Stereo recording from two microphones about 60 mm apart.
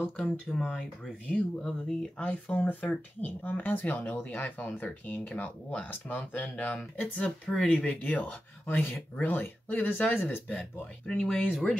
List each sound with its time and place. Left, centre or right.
0.5 s speech: centre; by 10.4 s left
11.1 s speech: centre